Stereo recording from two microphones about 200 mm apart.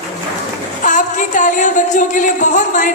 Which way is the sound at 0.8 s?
40° left (ahead or behind).